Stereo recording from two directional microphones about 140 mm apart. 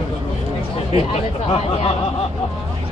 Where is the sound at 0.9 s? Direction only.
45° left (ahead or behind).